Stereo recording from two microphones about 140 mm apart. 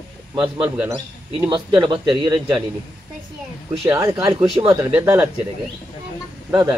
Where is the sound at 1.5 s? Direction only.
35° right (ahead or behind).